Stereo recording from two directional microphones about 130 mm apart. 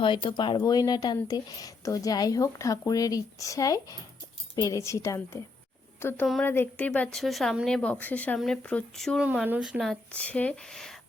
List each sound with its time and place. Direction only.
0.0 s speech: 40° left (ahead or behind); by 9.2 s 5° left (ahead or behind)
9.2 s speech: 10° right (ahead or behind)